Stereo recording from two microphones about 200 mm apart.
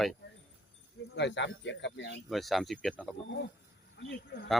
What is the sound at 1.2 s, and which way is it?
Speech, 60° left (ahead or behind).